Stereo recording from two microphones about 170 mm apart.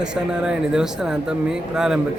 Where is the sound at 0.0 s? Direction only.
5° right (ahead or behind).